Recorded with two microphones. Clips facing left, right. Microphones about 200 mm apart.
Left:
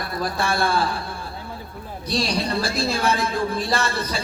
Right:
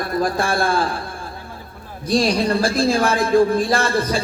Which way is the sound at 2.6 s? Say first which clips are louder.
Right 5 dB; 50° right (ahead or behind).